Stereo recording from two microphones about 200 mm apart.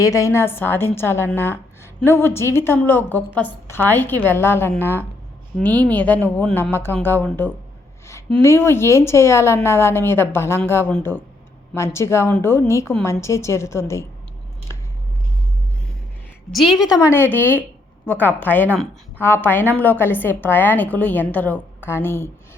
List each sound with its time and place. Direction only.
0.0 s a woman's voice: 15° left (ahead or behind)
16.5 s a woman's voice: centre (ahead or behind)
17.1 s a woman's voice: 10° left (ahead or behind)